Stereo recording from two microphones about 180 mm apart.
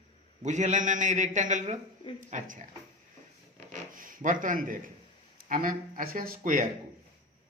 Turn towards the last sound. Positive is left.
turn(degrees=-45)  # may be behind; listen again after turning